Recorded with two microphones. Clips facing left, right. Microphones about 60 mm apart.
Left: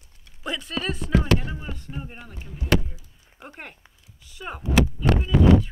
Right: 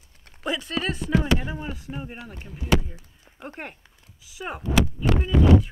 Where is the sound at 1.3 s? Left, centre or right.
Centre.